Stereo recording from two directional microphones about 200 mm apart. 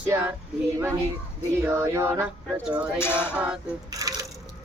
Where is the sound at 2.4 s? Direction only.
Centre (ahead or behind).